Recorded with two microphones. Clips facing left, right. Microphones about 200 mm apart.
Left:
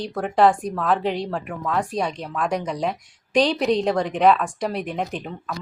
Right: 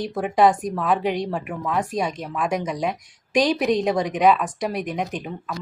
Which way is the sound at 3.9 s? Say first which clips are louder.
Even; centre (ahead or behind).